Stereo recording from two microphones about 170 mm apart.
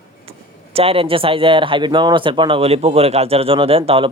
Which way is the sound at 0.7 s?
35° right (ahead or behind).